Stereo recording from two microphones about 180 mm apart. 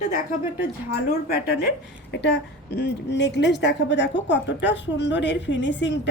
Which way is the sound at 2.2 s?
75° left (ahead or behind).